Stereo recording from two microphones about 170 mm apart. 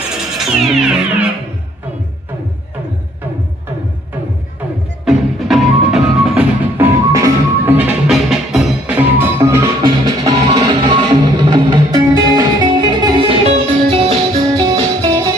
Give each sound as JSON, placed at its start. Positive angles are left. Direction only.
{"t": 0.3, "sound": "music", "side_deg": -5}
{"t": 5.0, "sound": "music", "side_deg": 0}